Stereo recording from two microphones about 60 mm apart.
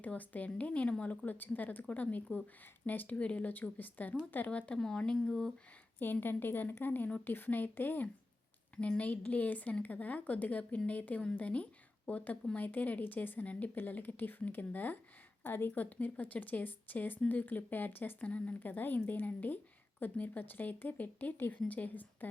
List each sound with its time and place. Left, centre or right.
0.0 s speech: left
4.8 s speech: centre
6.0 s a woman's voice: left
8.7 s a woman's voice: left
18.3 s a woman's voice: left